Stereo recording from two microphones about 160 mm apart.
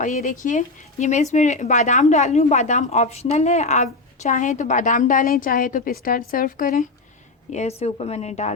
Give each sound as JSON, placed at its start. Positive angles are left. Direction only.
{"t": 0.0, "sound": "a woman's voice", "side_deg": 50}
{"t": 7.5, "sound": "speech", "side_deg": 45}